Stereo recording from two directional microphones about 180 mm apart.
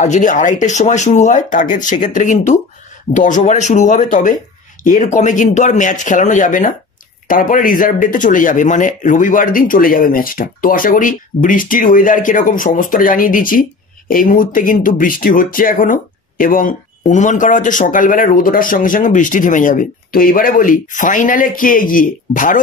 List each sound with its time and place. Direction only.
0.0 s speech: 40° left (ahead or behind)